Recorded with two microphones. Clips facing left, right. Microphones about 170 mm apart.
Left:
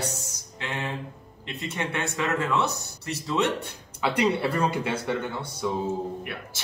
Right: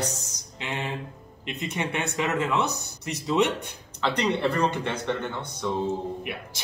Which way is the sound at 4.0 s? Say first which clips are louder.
Left 1 dB; 10° left (ahead or behind).